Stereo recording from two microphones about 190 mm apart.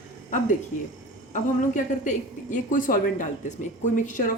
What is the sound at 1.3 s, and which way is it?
A woman's voice, 40° left (ahead or behind).